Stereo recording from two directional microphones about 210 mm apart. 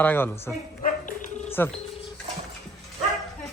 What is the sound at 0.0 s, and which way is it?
Speech, 10° left (ahead or behind).